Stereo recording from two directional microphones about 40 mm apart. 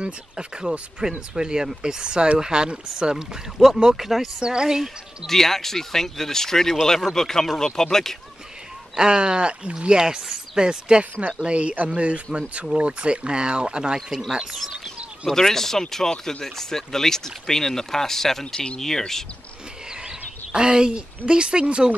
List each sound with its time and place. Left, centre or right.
0.0 s speech: right
3.7 s speech: centre
4.4 s speech: centre
5.2 s speech: centre
8.9 s speech: right
15.2 s speech: centre
20.1 s a woman's voice: right